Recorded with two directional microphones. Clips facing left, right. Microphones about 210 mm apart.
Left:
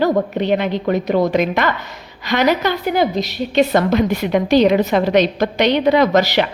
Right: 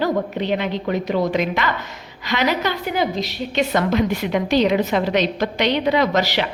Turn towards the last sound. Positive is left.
turn(degrees=45)  # may be behind; listen again after turning